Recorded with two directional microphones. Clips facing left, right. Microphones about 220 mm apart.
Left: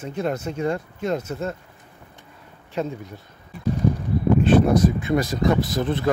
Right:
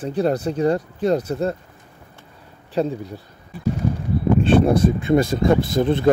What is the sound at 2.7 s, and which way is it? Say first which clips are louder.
Speech: right 5 dB; 35° right (ahead or behind).